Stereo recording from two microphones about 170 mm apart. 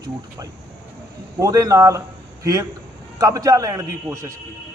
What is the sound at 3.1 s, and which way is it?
A man's voice, 20° right (ahead or behind).